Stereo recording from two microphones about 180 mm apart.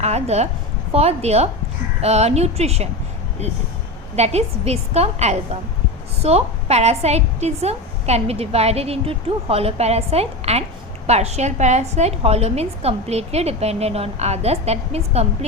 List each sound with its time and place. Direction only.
0.0 s a woman's voice: 35° right (ahead or behind)
4.1 s a woman's voice: 35° right (ahead or behind)